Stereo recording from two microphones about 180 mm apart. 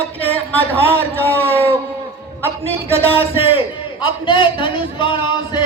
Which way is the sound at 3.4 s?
30° left (ahead or behind).